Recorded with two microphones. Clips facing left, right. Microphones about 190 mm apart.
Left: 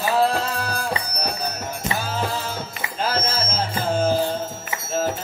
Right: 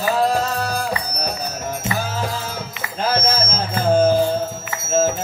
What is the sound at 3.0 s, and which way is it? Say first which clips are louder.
Music: right 5 dB; 45° right (ahead or behind).